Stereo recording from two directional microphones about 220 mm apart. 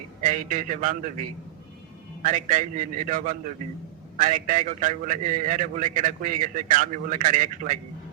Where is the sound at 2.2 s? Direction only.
35° right (ahead or behind).